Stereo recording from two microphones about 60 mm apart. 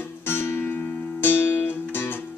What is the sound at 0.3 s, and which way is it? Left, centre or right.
Music, left.